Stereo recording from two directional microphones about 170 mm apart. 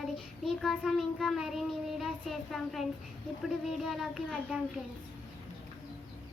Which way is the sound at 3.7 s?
Centre (ahead or behind).